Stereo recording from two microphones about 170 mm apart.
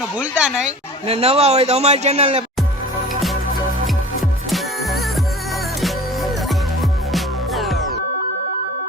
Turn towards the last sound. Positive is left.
turn(degrees=0)  # may be behind; listen again after turning